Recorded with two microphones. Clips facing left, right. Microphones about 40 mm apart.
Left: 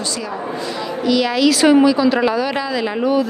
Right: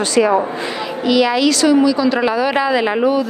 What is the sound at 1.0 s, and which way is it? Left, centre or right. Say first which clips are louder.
Speech: right 2 dB; centre.